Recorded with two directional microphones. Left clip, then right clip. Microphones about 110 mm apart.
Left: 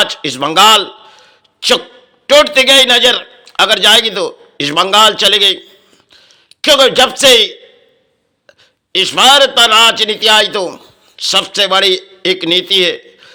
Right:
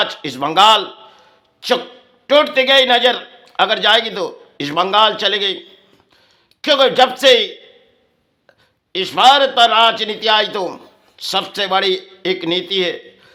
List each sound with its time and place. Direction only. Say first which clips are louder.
0.0 s a man's voice: left 5 dB; 20° left (ahead or behind)